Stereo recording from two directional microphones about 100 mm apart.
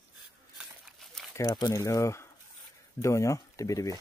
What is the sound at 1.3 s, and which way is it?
Speech, 35° left (ahead or behind).